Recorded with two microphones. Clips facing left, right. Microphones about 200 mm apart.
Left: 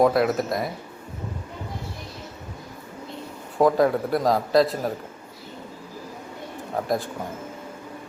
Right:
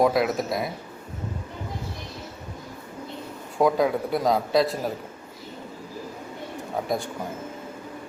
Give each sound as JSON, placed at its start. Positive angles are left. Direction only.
{"t": 0.0, "sound": "speech", "side_deg": 0}
{"t": 3.6, "sound": "speech", "side_deg": 0}
{"t": 6.8, "sound": "speech", "side_deg": 0}